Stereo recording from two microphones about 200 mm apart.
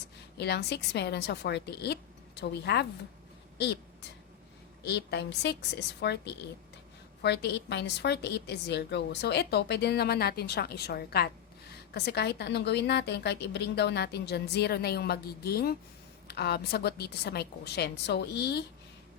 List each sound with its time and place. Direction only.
0.3 s a woman's voice: 55° left (ahead or behind)
4.8 s a woman's voice: 55° left (ahead or behind)